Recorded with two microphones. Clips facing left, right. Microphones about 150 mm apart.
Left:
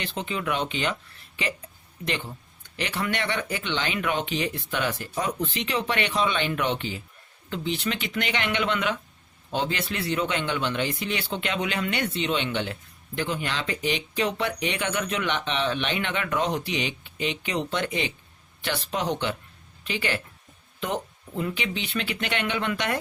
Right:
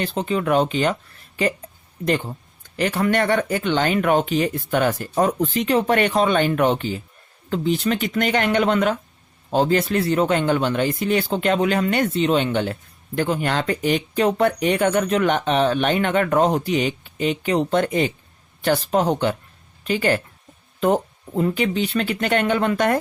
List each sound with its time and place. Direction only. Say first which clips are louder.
0.0 s speech: right 8 dB; 40° right (ahead or behind)